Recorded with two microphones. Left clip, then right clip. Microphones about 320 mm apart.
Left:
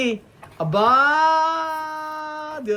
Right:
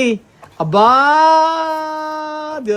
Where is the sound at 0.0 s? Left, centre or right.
Right.